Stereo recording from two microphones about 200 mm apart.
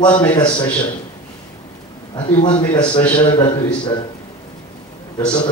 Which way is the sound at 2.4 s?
25° left (ahead or behind).